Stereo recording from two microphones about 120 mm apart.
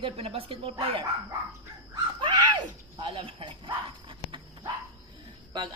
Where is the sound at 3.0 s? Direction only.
50° right (ahead or behind).